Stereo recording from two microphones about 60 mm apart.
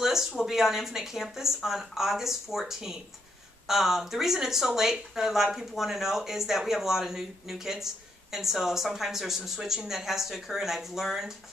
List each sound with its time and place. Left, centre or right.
0.0 s speech: centre